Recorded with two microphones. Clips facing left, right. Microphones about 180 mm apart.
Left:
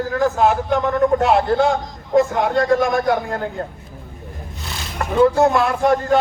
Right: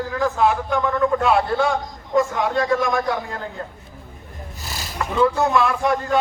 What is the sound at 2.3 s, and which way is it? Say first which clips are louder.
A man's voice: left 4 dB; 55° left (ahead or behind).